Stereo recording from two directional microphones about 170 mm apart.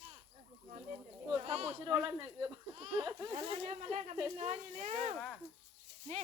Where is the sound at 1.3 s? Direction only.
35° right (ahead or behind).